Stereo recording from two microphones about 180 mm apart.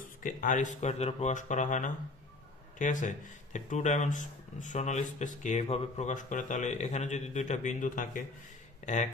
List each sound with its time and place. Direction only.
0.2 s speech: 45° left (ahead or behind)